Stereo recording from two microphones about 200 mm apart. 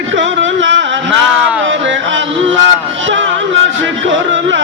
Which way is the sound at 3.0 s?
65° right (ahead or behind).